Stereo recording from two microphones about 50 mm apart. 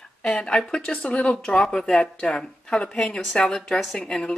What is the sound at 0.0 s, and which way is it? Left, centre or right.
Speech, centre.